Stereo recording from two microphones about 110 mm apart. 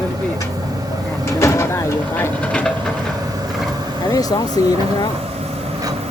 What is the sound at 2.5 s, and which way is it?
Train, 10° left (ahead or behind).